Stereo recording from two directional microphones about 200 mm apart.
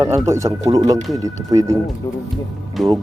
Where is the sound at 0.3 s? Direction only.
15° right (ahead or behind).